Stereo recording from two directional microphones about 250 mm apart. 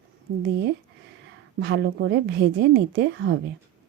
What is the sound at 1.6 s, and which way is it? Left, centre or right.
A woman's voice, right.